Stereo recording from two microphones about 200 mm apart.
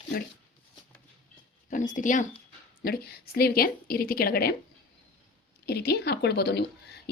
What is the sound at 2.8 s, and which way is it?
A woman's voice, 50° left (ahead or behind).